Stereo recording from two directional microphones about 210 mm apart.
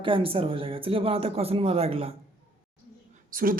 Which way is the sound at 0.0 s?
25° right (ahead or behind).